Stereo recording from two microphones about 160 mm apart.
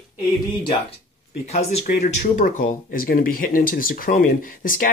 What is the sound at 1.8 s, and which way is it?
Speech, 55° left (ahead or behind).